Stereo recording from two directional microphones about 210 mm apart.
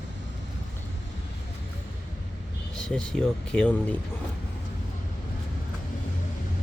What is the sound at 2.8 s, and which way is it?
Speech, 5° left (ahead or behind).